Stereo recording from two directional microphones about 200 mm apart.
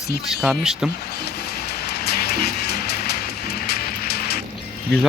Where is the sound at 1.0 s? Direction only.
55° left (ahead or behind).